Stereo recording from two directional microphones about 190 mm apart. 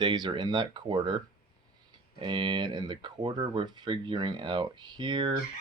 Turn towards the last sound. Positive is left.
turn(degrees=-25)  # may be behind; listen again after turning